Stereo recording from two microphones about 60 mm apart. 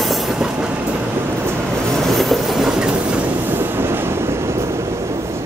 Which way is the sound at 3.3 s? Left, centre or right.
Right.